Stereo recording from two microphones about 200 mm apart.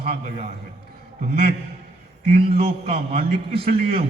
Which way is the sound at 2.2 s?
30° right (ahead or behind).